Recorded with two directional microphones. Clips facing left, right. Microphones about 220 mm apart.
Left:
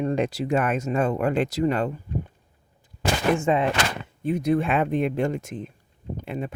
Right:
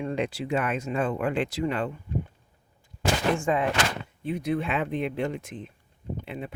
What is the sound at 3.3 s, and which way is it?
Speech, 25° left (ahead or behind).